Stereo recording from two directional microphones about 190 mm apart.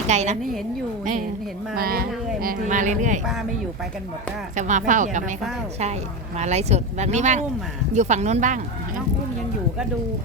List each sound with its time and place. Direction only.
0.1 s speech: 35° right (ahead or behind)
1.7 s speech: 50° right (ahead or behind)
4.5 s speech: 40° right (ahead or behind)
6.4 s speech: 35° right (ahead or behind)